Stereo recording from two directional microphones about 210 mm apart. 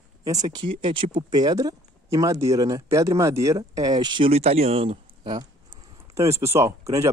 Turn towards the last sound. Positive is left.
turn(degrees=-15)  # may be behind; listen again after turning